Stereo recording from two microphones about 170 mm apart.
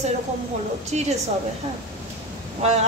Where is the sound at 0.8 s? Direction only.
40° right (ahead or behind).